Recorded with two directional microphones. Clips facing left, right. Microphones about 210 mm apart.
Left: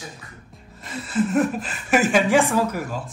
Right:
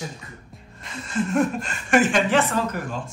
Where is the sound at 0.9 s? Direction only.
5° left (ahead or behind).